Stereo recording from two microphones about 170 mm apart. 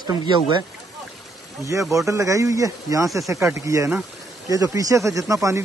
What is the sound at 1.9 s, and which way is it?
Speech, 20° right (ahead or behind).